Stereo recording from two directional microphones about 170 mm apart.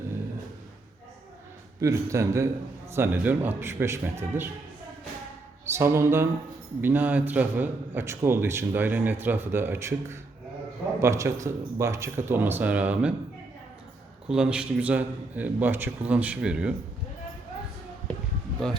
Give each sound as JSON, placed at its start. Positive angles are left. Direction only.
{"t": 1.8, "sound": "a man's voice", "side_deg": -20}
{"t": 5.6, "sound": "a man's voice", "side_deg": -15}
{"t": 14.3, "sound": "a man's voice", "side_deg": -5}